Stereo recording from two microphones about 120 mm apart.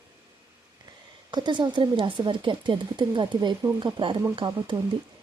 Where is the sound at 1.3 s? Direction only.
40° right (ahead or behind).